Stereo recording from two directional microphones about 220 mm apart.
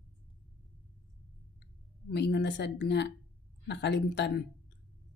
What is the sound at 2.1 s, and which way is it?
Speech, 50° left (ahead or behind).